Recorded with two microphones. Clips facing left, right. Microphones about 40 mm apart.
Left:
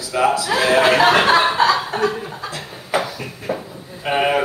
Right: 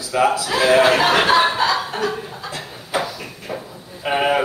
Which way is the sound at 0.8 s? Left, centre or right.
Left.